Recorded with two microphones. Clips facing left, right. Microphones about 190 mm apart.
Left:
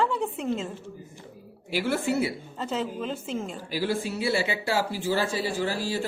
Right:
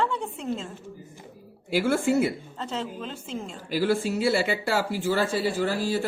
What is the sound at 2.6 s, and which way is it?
Speech, 5° left (ahead or behind).